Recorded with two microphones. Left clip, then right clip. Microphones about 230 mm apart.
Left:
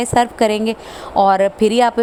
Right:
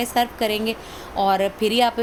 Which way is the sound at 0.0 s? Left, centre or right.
Left.